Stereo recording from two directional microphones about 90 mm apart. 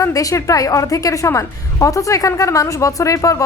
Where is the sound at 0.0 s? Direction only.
40° left (ahead or behind).